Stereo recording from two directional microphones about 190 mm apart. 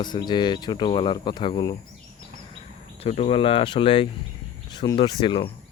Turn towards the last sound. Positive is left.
turn(degrees=25)  # may be behind; listen again after turning